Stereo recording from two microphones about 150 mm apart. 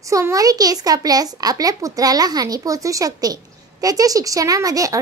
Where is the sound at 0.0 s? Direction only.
20° right (ahead or behind).